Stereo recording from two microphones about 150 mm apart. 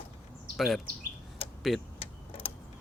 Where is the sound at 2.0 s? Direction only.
35° left (ahead or behind).